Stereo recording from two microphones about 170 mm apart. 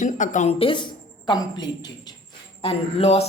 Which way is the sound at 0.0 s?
50° left (ahead or behind).